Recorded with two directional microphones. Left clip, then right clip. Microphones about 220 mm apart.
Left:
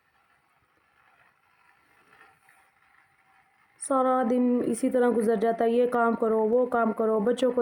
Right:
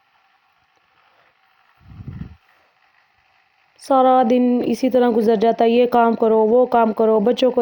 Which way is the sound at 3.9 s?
25° right (ahead or behind).